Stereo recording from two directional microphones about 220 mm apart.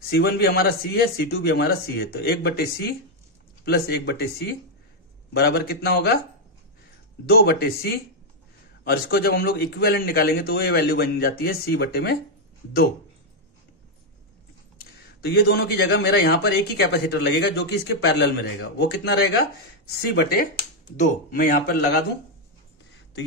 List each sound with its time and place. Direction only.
0.1 s speech: 45° left (ahead or behind)
7.2 s speech: 45° left (ahead or behind)
15.2 s speech: 45° left (ahead or behind)
20.9 s speech: 35° left (ahead or behind)